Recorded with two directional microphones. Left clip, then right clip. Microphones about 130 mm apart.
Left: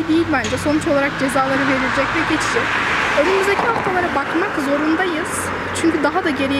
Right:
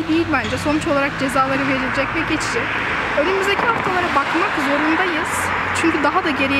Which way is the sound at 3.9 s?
15° right (ahead or behind).